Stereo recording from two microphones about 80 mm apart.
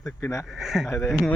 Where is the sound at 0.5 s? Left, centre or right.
Centre.